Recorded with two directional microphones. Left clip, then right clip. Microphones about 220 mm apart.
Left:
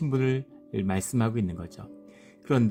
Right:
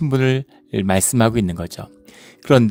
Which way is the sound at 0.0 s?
35° right (ahead or behind).